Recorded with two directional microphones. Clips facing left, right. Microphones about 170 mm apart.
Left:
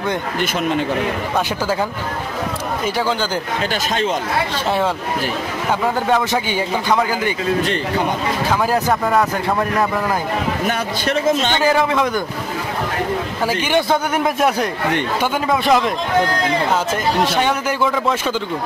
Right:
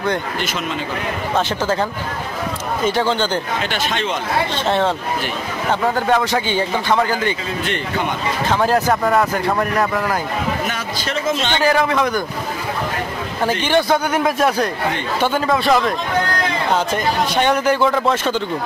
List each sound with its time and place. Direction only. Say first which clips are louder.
2.8 s speech: right 3 dB; 5° left (ahead or behind)
4.6 s speech: right 1 dB; 5° left (ahead or behind)
6.3 s speech: right 1 dB; 15° left (ahead or behind)
10.7 s a man's voice: left 4 dB; 55° left (ahead or behind)
11.5 s speech: even; 15° left (ahead or behind)
13.5 s speech: right 2 dB; 10° left (ahead or behind)
13.8 s speech: right 1 dB; 20° left (ahead or behind)
16.9 s speech: left 1 dB; 5° left (ahead or behind)